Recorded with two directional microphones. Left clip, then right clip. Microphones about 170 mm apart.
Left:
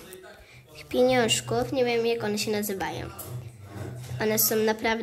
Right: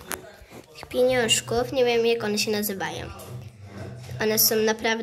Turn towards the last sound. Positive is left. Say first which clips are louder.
# right 2 dB
turn(degrees=5)  # may be behind; listen again after turning